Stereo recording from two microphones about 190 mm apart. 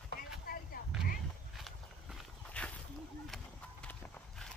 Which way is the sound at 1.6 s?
5° left (ahead or behind).